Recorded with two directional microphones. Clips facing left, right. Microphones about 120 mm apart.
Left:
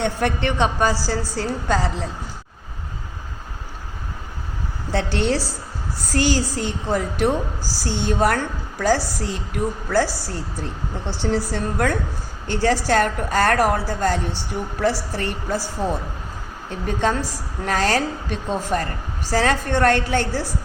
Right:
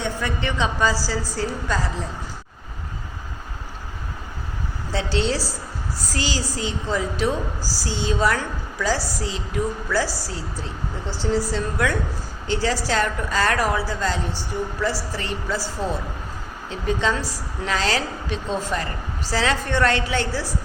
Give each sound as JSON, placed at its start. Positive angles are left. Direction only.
{"t": 0.0, "sound": "a woman's voice", "side_deg": 70}
{"t": 4.9, "sound": "a woman's voice", "side_deg": 55}
{"t": 16.6, "sound": "a woman's voice", "side_deg": 50}